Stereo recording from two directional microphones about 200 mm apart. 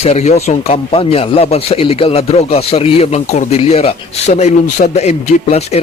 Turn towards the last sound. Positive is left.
turn(degrees=35)  # may be behind; listen again after turning